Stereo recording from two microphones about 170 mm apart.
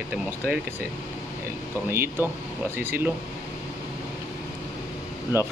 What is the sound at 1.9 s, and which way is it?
Speech, 15° right (ahead or behind).